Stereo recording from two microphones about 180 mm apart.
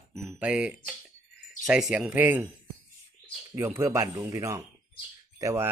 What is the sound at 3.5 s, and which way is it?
Speech, 15° right (ahead or behind).